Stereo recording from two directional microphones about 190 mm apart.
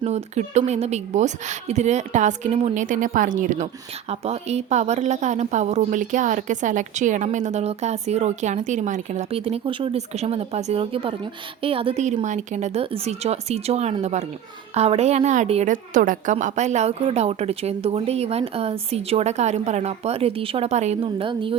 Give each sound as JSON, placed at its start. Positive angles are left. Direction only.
{"t": 0.0, "sound": "a woman's voice", "side_deg": -35}